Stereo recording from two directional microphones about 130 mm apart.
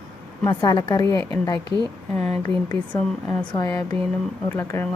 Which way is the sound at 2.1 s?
10° left (ahead or behind).